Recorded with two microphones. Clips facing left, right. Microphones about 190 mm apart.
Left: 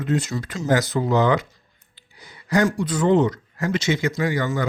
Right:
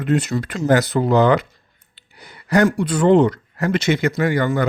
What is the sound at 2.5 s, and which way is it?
Speech, 60° right (ahead or behind).